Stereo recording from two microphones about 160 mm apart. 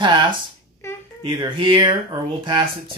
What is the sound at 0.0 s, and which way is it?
Speech, 30° right (ahead or behind).